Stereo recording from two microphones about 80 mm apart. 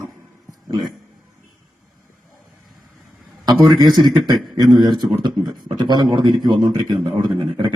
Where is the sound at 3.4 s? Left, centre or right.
Right.